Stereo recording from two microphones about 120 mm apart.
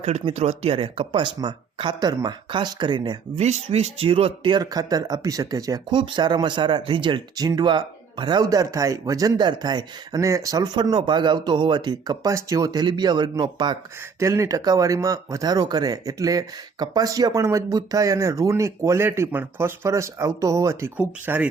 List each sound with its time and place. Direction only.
0.0 s speech: 55° right (ahead or behind); by 3.4 s 40° right (ahead or behind)
3.4 s speech: 65° right (ahead or behind); by 4.6 s 45° right (ahead or behind)
4.6 s speech: 30° right (ahead or behind)
5.9 s speech: 40° right (ahead or behind)
14.2 s speech: 25° right (ahead or behind)